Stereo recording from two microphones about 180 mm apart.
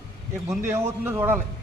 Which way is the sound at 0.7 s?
10° right (ahead or behind).